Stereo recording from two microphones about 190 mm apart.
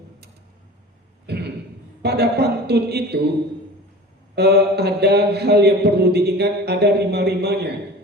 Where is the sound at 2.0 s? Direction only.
60° right (ahead or behind).